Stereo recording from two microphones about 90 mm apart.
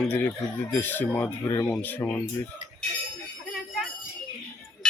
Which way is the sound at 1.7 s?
20° left (ahead or behind).